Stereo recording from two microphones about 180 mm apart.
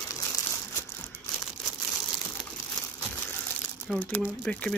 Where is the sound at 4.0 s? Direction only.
10° left (ahead or behind).